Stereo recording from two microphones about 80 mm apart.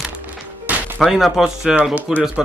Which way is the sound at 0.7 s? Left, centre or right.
Centre.